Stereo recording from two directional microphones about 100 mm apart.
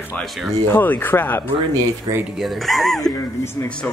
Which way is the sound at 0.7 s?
20° left (ahead or behind).